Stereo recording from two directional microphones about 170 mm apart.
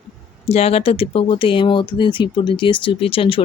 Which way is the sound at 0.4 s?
35° left (ahead or behind).